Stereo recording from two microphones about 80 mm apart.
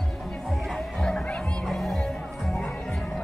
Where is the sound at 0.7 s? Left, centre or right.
Centre.